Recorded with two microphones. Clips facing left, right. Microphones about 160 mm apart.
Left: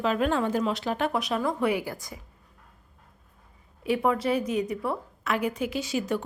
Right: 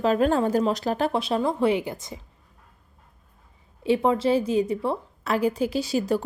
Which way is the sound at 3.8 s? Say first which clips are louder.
Right 4 dB; 25° right (ahead or behind).